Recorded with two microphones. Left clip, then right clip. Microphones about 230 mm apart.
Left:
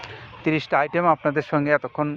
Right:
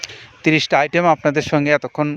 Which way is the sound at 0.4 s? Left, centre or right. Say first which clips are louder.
Right 6 dB; right.